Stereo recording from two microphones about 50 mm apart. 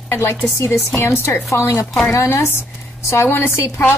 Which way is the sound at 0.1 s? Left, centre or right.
Left.